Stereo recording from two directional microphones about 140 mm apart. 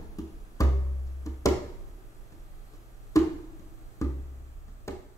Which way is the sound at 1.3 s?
25° left (ahead or behind).